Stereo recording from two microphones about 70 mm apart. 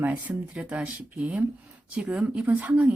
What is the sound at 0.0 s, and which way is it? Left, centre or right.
Speech, right.